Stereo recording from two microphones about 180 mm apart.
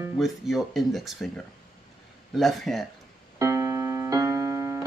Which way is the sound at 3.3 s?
15° right (ahead or behind).